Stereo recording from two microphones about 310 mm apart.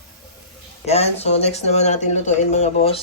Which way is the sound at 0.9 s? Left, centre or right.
Centre.